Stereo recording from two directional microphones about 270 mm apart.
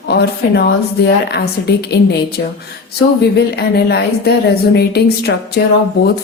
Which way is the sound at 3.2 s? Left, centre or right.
Left.